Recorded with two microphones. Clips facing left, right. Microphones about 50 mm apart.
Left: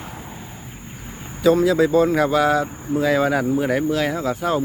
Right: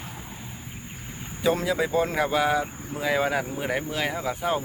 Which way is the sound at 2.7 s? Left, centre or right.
Centre.